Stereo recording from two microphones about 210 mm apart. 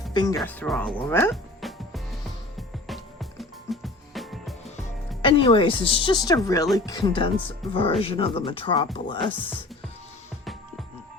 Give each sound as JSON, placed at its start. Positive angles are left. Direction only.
{"t": 0.1, "sound": "speech", "side_deg": 20}
{"t": 0.3, "sound": "speech", "side_deg": 5}
{"t": 1.6, "sound": "music", "side_deg": 0}
{"t": 5.2, "sound": "speech", "side_deg": 25}